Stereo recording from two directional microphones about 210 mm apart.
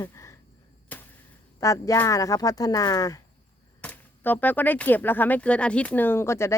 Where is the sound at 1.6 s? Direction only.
15° left (ahead or behind).